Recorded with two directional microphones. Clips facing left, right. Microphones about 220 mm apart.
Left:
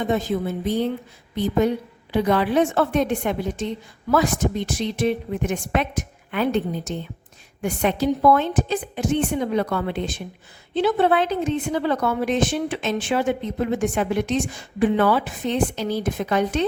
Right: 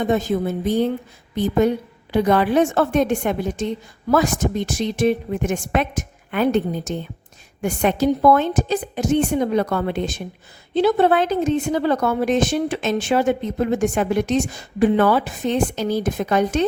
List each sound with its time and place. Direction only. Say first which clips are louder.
0.0 s a woman's voice: right 3 dB; 45° right (ahead or behind)